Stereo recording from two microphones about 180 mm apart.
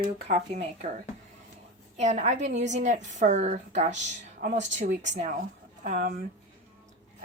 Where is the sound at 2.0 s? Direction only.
40° right (ahead or behind).